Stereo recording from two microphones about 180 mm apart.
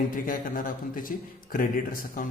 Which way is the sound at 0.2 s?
50° left (ahead or behind).